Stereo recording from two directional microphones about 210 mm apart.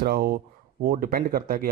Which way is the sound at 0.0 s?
45° right (ahead or behind).